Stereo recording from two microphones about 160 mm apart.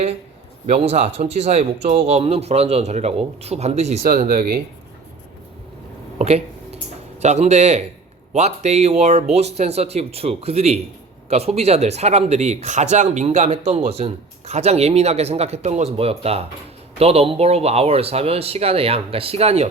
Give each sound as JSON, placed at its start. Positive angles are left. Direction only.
{"t": 0.7, "sound": "speech", "side_deg": -40}
{"t": 4.0, "sound": "speech", "side_deg": -60}
{"t": 6.1, "sound": "a sound", "side_deg": -40}
{"t": 7.2, "sound": "speech", "side_deg": -45}